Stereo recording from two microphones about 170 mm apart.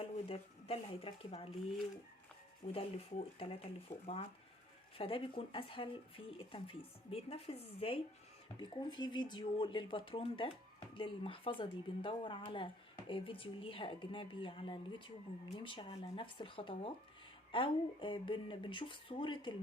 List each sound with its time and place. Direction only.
0.0 s speech: 35° left (ahead or behind)
2.7 s speech: 35° left (ahead or behind)